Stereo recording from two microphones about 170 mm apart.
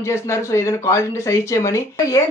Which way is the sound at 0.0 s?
15° left (ahead or behind).